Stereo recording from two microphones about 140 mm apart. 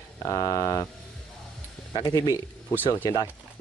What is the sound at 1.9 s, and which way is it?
Speech, 30° left (ahead or behind).